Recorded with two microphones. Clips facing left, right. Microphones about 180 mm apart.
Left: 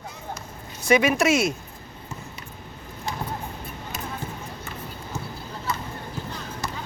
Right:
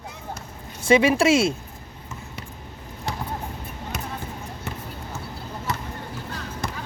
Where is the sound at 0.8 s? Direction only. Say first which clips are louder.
Right 2 dB; 25° right (ahead or behind).